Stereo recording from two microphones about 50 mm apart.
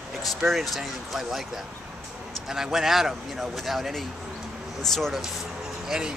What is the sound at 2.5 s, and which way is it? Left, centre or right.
Speech, centre.